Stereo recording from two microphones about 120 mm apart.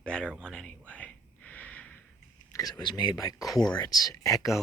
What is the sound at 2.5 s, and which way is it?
Speech, 30° left (ahead or behind).